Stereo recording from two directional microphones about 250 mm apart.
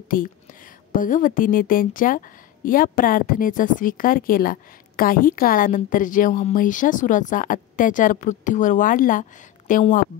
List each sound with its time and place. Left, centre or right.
0.1 s a woman's voice: left